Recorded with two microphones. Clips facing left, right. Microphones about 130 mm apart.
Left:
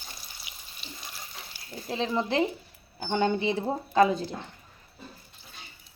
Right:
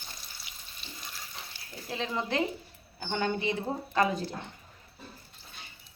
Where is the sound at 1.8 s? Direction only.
30° left (ahead or behind).